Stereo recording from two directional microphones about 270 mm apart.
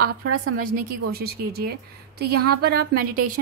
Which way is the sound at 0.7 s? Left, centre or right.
Right.